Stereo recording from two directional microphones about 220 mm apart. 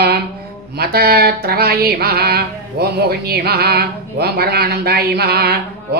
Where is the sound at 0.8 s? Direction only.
45° right (ahead or behind).